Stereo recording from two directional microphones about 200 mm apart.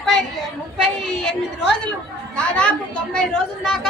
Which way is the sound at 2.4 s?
5° left (ahead or behind).